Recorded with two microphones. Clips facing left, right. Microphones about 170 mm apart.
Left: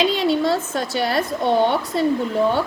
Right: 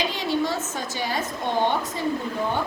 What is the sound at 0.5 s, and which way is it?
Speech, 65° left (ahead or behind).